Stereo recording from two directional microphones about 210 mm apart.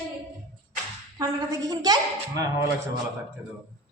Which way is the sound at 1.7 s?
20° right (ahead or behind).